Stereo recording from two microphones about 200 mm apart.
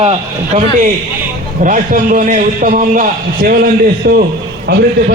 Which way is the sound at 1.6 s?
40° right (ahead or behind).